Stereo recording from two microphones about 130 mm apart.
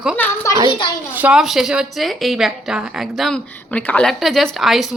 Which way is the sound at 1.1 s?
10° right (ahead or behind).